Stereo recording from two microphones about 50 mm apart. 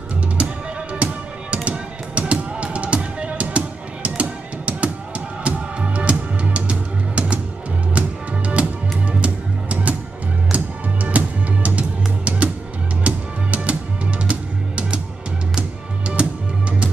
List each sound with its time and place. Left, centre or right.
0.9 s music: right
8.6 s music: right
16.2 s music: right